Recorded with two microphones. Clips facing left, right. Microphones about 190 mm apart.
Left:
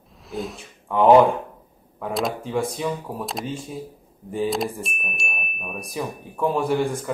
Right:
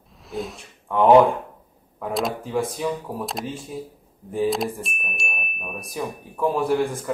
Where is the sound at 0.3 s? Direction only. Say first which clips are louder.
Even; centre (ahead or behind).